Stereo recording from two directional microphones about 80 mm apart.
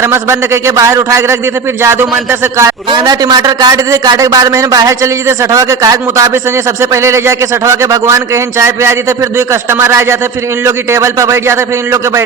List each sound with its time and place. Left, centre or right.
0.0 s a man's voice: right
2.9 s a man's voice: right